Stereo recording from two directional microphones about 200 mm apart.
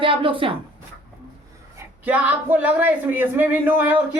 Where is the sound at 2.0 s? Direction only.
5° right (ahead or behind).